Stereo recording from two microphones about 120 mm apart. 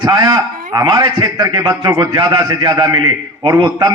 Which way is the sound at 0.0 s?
35° right (ahead or behind).